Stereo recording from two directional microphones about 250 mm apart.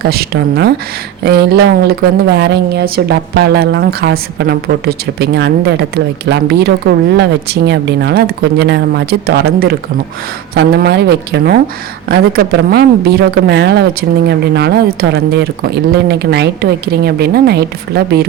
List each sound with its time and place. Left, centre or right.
0.0 s speech: right
10.5 s speech: right